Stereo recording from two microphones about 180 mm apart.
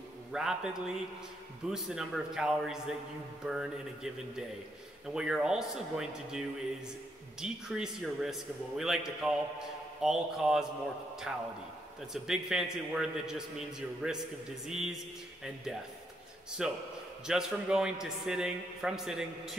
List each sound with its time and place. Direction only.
0.3 s a man's voice: 5° right (ahead or behind)
16.6 s a man's voice: 5° right (ahead or behind)